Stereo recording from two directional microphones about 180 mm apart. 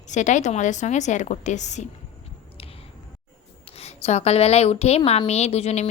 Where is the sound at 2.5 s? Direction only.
30° left (ahead or behind).